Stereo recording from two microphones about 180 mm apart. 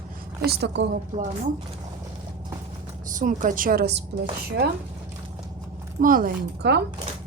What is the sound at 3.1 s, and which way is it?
Speech, 45° right (ahead or behind).